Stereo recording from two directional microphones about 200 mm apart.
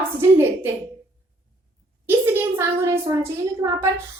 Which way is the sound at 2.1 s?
10° right (ahead or behind).